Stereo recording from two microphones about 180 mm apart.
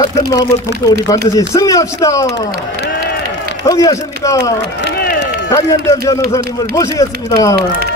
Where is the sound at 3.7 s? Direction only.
20° left (ahead or behind).